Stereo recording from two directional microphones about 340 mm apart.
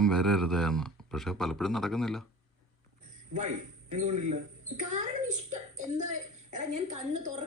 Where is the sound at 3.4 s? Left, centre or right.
Right.